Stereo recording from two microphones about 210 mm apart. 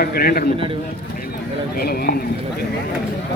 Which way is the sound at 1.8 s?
45° left (ahead or behind).